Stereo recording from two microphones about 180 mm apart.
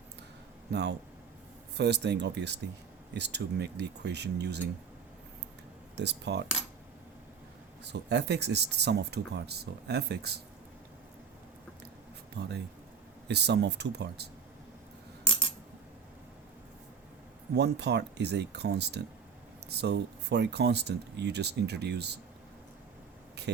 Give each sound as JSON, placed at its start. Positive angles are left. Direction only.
{"t": 0.7, "sound": "speech", "side_deg": -70}
{"t": 6.0, "sound": "speech", "side_deg": -70}
{"t": 7.9, "sound": "speech", "side_deg": -70}
{"t": 12.4, "sound": "speech", "side_deg": -65}
{"t": 17.5, "sound": "speech", "side_deg": -65}